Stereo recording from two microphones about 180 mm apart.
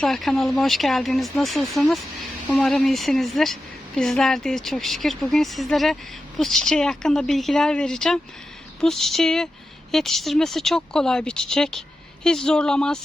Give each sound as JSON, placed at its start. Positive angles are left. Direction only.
{"t": 0.0, "sound": "a woman's voice", "side_deg": 0}